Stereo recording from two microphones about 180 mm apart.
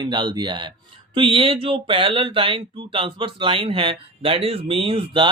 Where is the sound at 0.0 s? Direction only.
25° right (ahead or behind).